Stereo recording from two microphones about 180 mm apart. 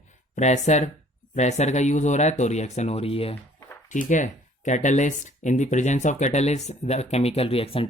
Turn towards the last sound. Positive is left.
turn(degrees=30)  # may be behind; listen again after turning